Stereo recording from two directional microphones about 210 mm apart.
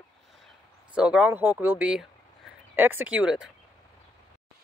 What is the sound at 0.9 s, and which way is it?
Speech, 5° right (ahead or behind).